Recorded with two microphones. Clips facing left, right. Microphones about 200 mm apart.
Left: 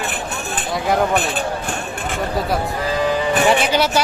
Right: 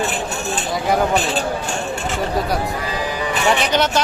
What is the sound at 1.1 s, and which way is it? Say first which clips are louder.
Speech: right 1 dB; 55° left (ahead or behind).